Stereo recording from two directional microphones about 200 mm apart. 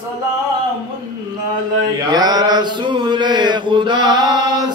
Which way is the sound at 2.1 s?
20° right (ahead or behind).